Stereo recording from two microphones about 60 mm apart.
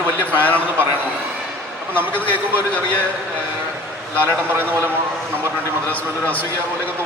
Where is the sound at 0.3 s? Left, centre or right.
Left.